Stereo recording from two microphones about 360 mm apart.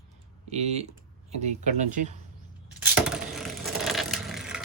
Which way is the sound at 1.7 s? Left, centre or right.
Centre.